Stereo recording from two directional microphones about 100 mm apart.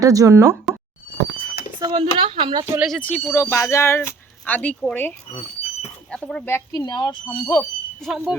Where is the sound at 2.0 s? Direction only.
65° right (ahead or behind).